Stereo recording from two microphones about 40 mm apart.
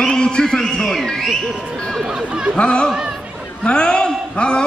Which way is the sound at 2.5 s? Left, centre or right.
Left.